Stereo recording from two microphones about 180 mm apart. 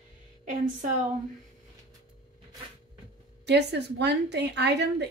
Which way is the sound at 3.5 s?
70° right (ahead or behind).